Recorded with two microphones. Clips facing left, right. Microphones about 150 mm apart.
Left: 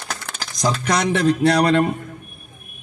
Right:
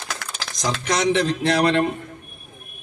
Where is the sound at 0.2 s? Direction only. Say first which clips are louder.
Left 1 dB; 90° right.